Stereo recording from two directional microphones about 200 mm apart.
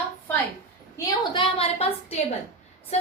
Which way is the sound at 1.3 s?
25° left (ahead or behind).